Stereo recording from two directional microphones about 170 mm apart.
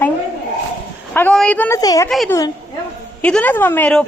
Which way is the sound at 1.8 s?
20° left (ahead or behind).